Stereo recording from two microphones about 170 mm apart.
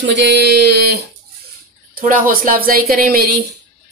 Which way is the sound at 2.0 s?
55° right (ahead or behind).